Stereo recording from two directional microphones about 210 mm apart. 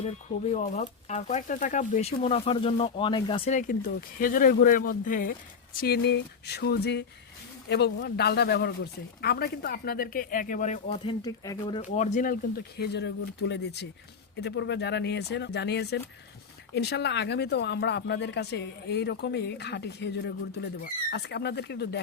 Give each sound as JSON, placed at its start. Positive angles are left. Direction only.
{"t": 0.5, "sound": "speech", "side_deg": 30}
{"t": 11.8, "sound": "speech", "side_deg": 35}